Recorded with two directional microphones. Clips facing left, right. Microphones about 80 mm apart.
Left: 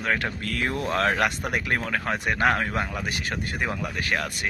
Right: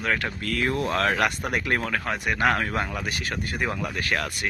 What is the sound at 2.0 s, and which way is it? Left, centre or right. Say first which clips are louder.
Speech: left 1 dB; left.